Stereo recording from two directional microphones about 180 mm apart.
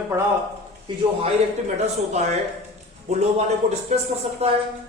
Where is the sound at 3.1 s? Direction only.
35° right (ahead or behind).